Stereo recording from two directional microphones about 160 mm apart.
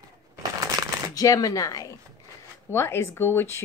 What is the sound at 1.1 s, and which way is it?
A woman's voice, 20° left (ahead or behind).